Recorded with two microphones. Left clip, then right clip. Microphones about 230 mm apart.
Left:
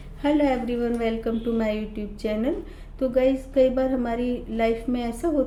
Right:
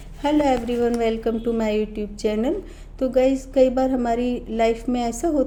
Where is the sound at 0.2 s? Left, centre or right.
Right.